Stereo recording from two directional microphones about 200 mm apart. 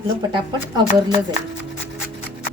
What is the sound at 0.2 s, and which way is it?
Speech, 25° right (ahead or behind).